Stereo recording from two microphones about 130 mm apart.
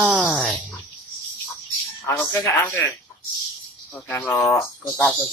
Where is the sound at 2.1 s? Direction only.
20° left (ahead or behind).